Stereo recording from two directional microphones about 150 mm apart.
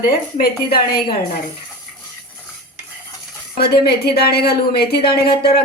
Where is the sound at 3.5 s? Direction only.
90° left.